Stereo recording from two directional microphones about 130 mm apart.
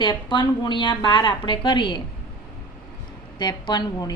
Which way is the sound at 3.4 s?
35° left (ahead or behind).